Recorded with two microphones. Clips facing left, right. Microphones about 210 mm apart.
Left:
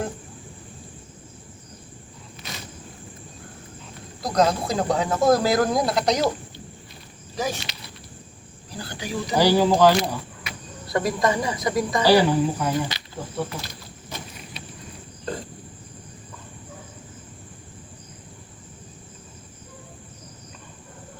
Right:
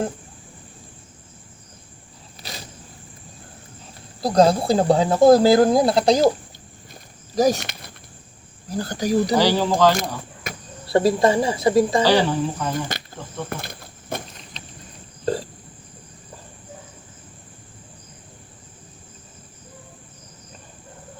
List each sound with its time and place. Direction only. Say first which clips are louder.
2.4 s a sound: right 1 dB; 35° right (ahead or behind)
4.2 s speech: right 5 dB; 30° right (ahead or behind)
7.3 s speech: right 10 dB; 40° right (ahead or behind)
7.6 s a sound: right 2 dB; 50° right (ahead or behind)
8.7 s speech: right 10 dB; 45° right (ahead or behind)
9.3 s speech: even; 10° left (ahead or behind)
10.5 s cricket: right 5 dB; 45° right (ahead or behind)
10.8 s speech: right 6 dB; 30° right (ahead or behind)
12.0 s speech: left 1 dB; 10° left (ahead or behind)
12.9 s insect: right 5 dB; 50° right (ahead or behind)
13.5 s a sound: right 3 dB; 55° right (ahead or behind)
14.5 s a sound: left 1 dB; 10° left (ahead or behind)